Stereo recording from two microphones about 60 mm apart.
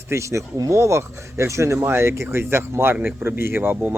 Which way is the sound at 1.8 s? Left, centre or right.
Right.